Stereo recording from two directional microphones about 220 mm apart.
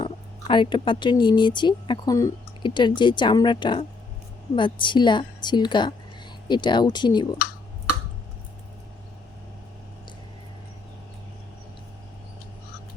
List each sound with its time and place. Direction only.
0.0 s speech: 20° left (ahead or behind)